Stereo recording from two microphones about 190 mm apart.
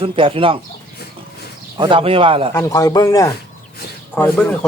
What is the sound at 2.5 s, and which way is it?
Speech, 20° left (ahead or behind).